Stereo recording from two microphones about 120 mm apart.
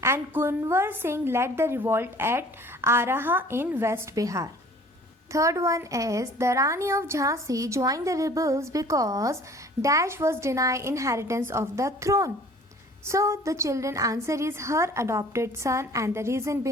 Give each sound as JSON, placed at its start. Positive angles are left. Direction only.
{"t": 0.0, "sound": "a woman's voice", "side_deg": -20}